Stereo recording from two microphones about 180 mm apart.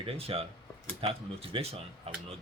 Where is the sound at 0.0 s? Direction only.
35° right (ahead or behind).